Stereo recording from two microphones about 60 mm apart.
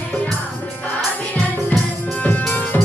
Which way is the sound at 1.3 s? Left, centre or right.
Left.